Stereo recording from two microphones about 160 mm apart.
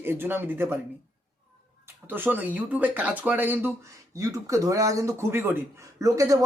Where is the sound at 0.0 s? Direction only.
15° right (ahead or behind).